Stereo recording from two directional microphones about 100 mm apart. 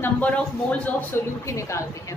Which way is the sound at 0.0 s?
15° left (ahead or behind).